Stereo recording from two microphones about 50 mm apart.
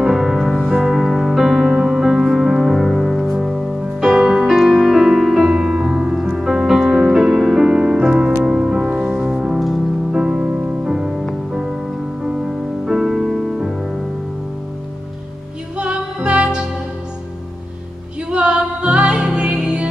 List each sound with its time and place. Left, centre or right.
0.0 s music: centre
3.8 s music: centre
10.4 s music: right
10.9 s music: centre
15.8 s music: right
18.3 s music: right